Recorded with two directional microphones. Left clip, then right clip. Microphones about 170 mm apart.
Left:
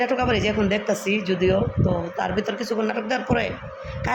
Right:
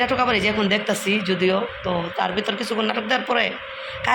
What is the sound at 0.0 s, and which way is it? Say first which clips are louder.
A man's voice: right 2 dB; 15° left (ahead or behind).